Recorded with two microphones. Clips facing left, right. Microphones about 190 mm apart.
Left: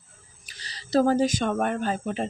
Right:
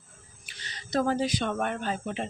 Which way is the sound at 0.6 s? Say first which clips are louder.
Left 6 dB; 40° left (ahead or behind).